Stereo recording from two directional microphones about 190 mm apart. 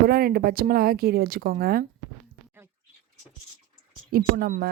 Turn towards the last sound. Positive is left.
turn(degrees=-50)  # may be behind; listen again after turning